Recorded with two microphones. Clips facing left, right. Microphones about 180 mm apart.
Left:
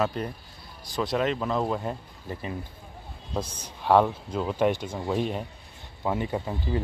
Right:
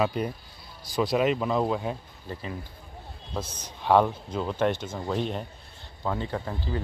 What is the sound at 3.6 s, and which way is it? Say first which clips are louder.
Speech: even; 5° left (ahead or behind).